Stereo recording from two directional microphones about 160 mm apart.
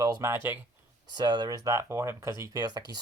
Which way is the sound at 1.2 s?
30° right (ahead or behind).